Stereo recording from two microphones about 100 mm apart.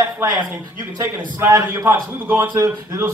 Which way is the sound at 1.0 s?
30° right (ahead or behind).